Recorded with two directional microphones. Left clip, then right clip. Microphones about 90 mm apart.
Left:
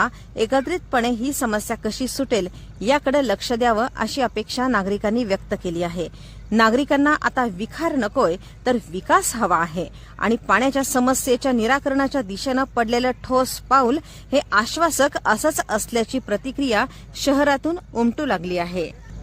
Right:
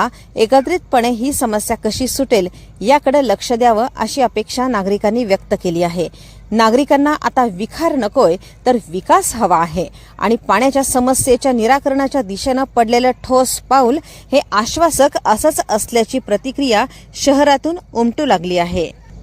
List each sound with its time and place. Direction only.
0.0 s a woman's voice: 35° right (ahead or behind)
2.8 s speech: 20° right (ahead or behind)
18.2 s a woman's voice: 45° right (ahead or behind)